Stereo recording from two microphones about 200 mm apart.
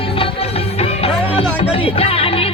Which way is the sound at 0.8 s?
30° left (ahead or behind).